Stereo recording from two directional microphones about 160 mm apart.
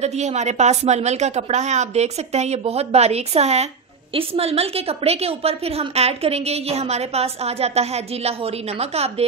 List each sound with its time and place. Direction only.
0.0 s a woman's voice: 45° right (ahead or behind)